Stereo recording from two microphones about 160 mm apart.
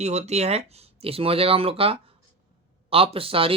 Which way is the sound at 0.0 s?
45° right (ahead or behind).